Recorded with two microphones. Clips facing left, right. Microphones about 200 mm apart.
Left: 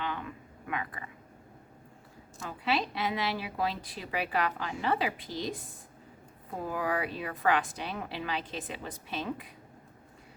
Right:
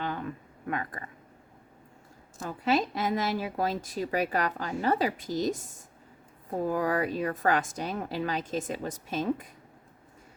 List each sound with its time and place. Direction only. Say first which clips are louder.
0.0 s a sound: right 3 dB; 40° right (ahead or behind)
2.4 s a woman's voice: right 4 dB; 45° right (ahead or behind)
6.7 s a woman's voice: right 4 dB; 45° right (ahead or behind)